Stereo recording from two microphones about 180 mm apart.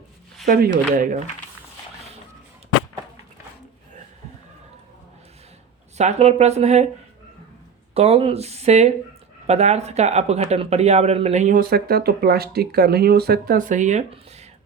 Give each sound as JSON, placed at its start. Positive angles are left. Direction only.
{"t": 0.4, "sound": "speech", "side_deg": -55}
{"t": 6.0, "sound": "speech", "side_deg": -35}
{"t": 7.9, "sound": "speech", "side_deg": -35}
{"t": 11.7, "sound": "speech", "side_deg": -60}